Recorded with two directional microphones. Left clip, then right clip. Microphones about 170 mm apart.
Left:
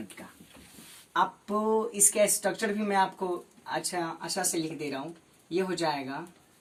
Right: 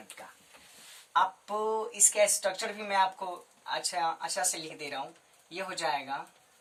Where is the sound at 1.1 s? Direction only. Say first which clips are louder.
Even; 25° right (ahead or behind).